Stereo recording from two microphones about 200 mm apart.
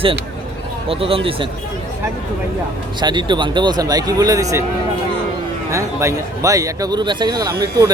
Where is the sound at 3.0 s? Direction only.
20° right (ahead or behind).